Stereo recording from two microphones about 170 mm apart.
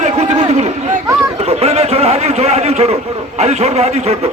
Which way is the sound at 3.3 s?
40° right (ahead or behind).